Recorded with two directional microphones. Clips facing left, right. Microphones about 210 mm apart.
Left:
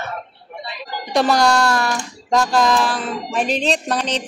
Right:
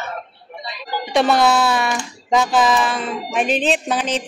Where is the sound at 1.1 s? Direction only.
Centre (ahead or behind).